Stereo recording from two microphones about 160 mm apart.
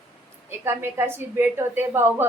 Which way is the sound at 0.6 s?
15° right (ahead or behind).